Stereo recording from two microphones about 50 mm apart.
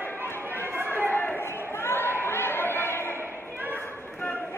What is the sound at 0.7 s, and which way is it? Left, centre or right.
Chatter, right.